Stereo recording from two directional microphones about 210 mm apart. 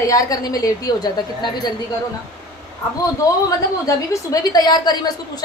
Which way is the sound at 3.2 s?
15° left (ahead or behind).